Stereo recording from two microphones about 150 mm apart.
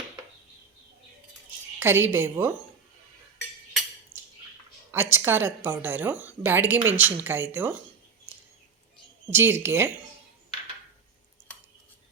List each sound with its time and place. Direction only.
1.8 s a woman's voice: 15° right (ahead or behind)
4.9 s a woman's voice: 15° right (ahead or behind)
9.3 s a woman's voice: 15° right (ahead or behind)